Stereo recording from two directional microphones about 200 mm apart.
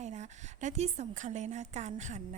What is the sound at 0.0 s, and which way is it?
A woman's voice, 35° right (ahead or behind).